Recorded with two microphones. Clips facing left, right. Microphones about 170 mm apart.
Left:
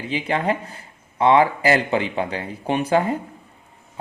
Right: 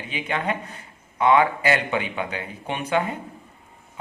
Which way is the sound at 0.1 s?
35° left (ahead or behind).